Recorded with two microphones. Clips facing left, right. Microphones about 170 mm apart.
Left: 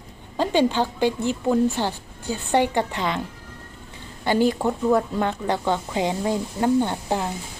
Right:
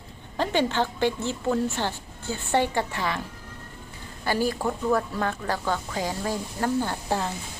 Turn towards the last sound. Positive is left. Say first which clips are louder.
# left 3 dB
turn(degrees=15)  # may be behind; listen again after turning